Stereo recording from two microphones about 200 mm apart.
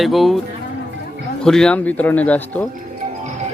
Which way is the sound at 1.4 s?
5° left (ahead or behind).